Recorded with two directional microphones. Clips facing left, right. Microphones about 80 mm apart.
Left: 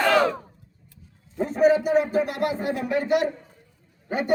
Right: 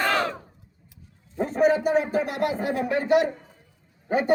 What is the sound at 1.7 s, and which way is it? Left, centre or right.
A man's voice, right.